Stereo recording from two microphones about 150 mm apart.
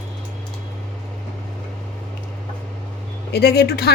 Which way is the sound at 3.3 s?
90° left.